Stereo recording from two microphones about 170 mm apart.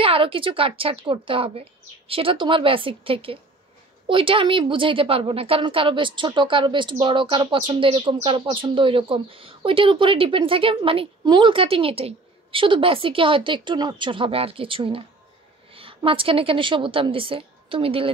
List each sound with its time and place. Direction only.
0.0 s a woman's voice: 30° right (ahead or behind)